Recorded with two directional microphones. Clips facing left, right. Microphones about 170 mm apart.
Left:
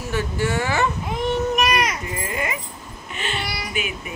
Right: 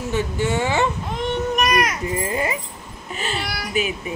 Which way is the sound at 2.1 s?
30° right (ahead or behind).